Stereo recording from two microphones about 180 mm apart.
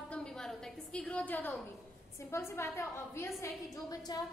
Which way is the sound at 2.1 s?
15° left (ahead or behind).